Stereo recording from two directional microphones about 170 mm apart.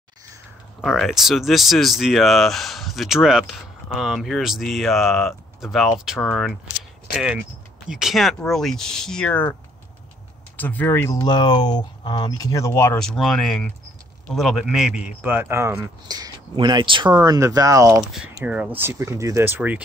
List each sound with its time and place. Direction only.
0.8 s speech: centre (ahead or behind)
7.9 s speech: centre (ahead or behind)
10.6 s speech: 10° left (ahead or behind)
13.0 s speech: centre (ahead or behind); by 18.0 s 20° right (ahead or behind)
18.4 s speech: 5° right (ahead or behind)